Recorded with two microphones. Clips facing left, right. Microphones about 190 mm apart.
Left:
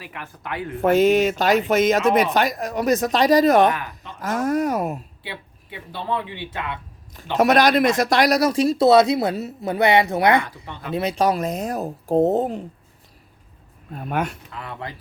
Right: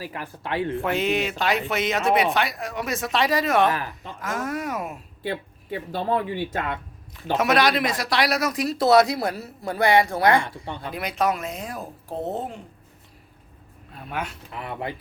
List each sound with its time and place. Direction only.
0.0 s speech: 35° right (ahead or behind)
0.8 s speech: 45° left (ahead or behind)
5.2 s speech: 45° right (ahead or behind)
7.3 s speech: 40° left (ahead or behind); by 10.4 s 20° left (ahead or behind)
10.4 s speech: 30° right (ahead or behind)
10.9 s speech: 30° left (ahead or behind)
13.9 s speech: 50° left (ahead or behind)
14.5 s speech: 25° right (ahead or behind)